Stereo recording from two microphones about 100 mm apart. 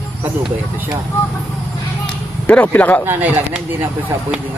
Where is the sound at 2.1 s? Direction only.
10° left (ahead or behind).